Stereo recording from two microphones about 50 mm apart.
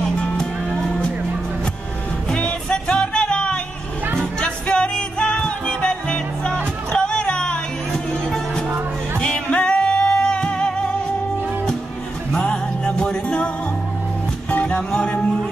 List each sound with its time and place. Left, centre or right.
0.2 s music: centre
2.3 s music: centre
12.4 s music: centre
14.5 s music: left